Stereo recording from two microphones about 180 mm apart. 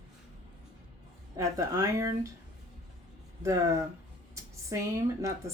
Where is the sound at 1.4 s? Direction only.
15° right (ahead or behind).